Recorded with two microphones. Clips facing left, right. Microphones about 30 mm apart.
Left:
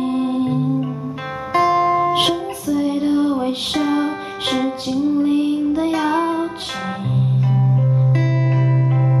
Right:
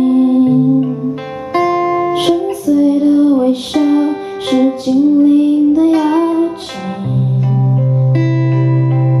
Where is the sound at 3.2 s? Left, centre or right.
Left.